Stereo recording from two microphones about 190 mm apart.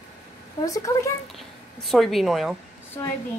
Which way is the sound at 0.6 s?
15° left (ahead or behind).